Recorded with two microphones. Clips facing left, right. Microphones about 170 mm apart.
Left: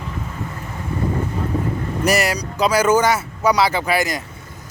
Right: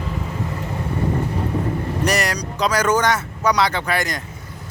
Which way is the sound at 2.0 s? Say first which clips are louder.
Left 4 dB; 5° left (ahead or behind).